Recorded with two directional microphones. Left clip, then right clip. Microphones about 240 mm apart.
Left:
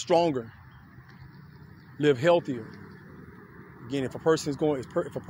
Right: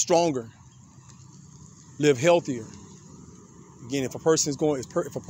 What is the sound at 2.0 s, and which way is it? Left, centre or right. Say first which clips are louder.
Speech: right 2 dB; right.